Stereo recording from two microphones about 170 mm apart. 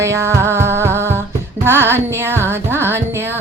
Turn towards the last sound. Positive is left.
turn(degrees=-15)  # may be behind; listen again after turning